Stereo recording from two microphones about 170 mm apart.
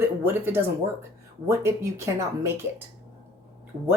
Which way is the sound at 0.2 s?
15° right (ahead or behind).